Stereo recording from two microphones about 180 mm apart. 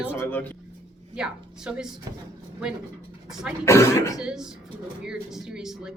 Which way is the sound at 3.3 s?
5° right (ahead or behind).